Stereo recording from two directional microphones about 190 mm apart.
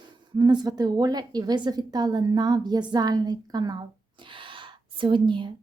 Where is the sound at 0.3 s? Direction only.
20° right (ahead or behind).